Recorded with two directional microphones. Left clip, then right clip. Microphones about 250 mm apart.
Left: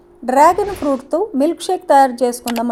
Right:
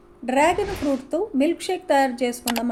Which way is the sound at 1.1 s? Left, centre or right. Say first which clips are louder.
Left 5 dB; left.